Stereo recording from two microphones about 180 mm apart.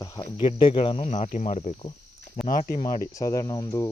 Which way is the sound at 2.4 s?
50° left (ahead or behind).